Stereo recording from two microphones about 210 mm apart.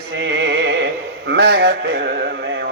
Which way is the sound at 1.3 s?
50° right (ahead or behind).